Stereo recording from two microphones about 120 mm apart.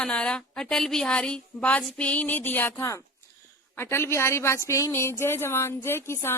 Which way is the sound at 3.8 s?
20° left (ahead or behind).